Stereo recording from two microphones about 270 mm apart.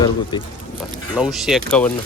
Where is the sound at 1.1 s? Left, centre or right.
Centre.